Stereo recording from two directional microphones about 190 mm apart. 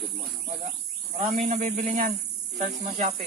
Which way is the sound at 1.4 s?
40° right (ahead or behind).